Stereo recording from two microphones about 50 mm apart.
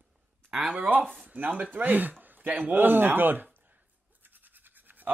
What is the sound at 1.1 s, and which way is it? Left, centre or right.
Speech, right.